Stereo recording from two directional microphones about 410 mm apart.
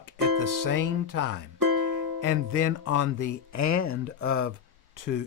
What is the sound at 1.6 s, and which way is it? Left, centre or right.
Music, right.